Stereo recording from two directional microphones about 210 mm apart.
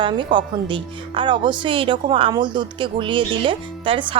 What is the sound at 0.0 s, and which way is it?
Speech, 20° right (ahead or behind).